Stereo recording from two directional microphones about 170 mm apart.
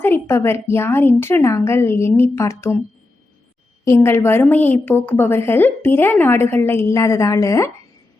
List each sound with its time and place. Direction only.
0.0 s a woman's voice: 15° left (ahead or behind)
3.8 s a woman's voice: 15° left (ahead or behind)